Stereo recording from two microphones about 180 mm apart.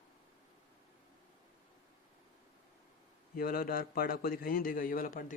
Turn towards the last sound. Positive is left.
turn(degrees=50)  # may be behind; listen again after turning